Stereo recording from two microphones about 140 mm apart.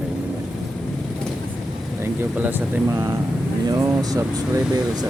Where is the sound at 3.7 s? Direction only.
25° right (ahead or behind).